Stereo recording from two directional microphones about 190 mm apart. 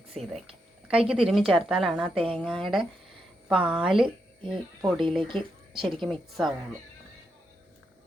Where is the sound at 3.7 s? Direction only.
5° right (ahead or behind).